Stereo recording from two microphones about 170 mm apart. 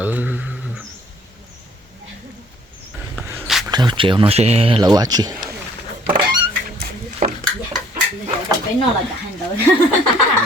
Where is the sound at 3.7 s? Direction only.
25° right (ahead or behind).